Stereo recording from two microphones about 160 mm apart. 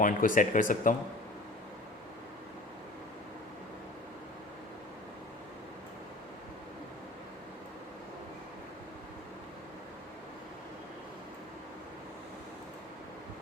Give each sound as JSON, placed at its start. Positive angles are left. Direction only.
{"t": 0.0, "sound": "speech", "side_deg": 55}